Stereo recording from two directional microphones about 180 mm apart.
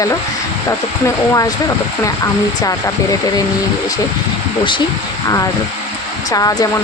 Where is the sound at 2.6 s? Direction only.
20° left (ahead or behind).